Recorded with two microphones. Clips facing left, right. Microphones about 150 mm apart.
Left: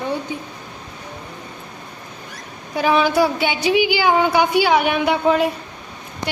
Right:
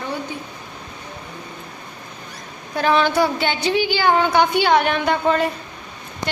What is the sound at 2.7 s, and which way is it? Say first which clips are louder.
A woman's voice: left 1 dB; 10° left (ahead or behind).